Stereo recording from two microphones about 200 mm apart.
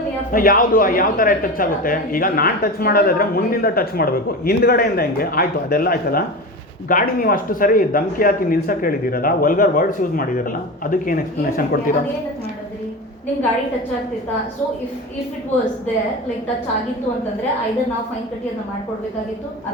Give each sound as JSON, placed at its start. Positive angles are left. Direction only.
{"t": 0.3, "sound": "speech", "side_deg": 45}